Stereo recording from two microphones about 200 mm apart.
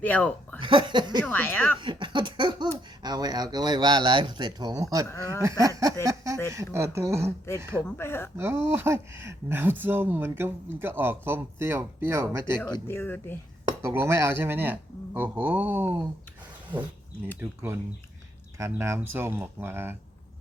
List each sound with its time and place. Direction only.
0.0 s speech: 5° left (ahead or behind)
0.6 s speech: 25° right (ahead or behind)
1.2 s speech: 10° left (ahead or behind)
1.8 s speech: 25° right (ahead or behind)
5.0 s speech: 15° left (ahead or behind)
5.4 s speech: 15° right (ahead or behind)
7.9 s speech: 10° left (ahead or behind)
8.4 s speech: 10° right (ahead or behind)
12.7 s speech: 10° left (ahead or behind)
13.8 s speech: 10° right (ahead or behind)
17.4 s speech: 10° right (ahead or behind)